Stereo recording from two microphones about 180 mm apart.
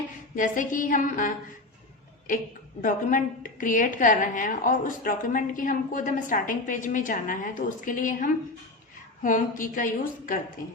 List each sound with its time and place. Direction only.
0.3 s a woman's voice: 45° left (ahead or behind)
2.8 s a woman's voice: 50° left (ahead or behind)